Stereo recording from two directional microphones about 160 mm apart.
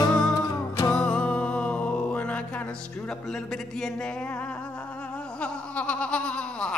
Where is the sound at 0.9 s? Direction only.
5° left (ahead or behind).